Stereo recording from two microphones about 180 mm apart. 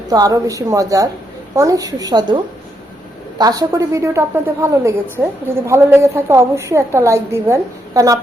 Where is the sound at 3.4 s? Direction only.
20° right (ahead or behind).